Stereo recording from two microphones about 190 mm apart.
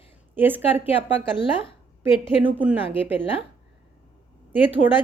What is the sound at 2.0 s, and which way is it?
A woman's voice, 10° right (ahead or behind).